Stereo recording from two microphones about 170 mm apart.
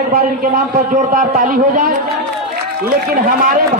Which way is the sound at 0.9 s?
55° right (ahead or behind).